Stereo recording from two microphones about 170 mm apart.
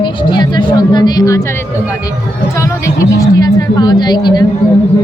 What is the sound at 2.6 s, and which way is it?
A woman's voice, 20° left (ahead or behind).